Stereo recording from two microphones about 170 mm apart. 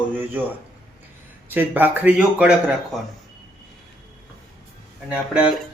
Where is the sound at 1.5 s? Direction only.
10° right (ahead or behind).